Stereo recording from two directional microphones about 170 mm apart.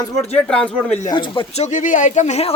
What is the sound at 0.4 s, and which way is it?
Speech, 5° left (ahead or behind).